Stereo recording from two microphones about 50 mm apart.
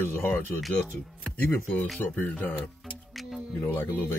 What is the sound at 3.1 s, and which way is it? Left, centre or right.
Music, centre.